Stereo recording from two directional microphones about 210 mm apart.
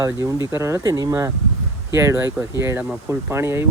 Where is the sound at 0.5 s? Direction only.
15° right (ahead or behind).